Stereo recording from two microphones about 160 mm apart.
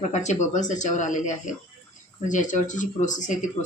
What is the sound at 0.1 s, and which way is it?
Speech, 45° left (ahead or behind).